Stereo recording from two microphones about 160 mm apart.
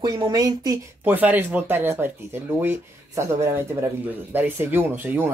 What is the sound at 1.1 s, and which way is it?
Speech, 10° right (ahead or behind).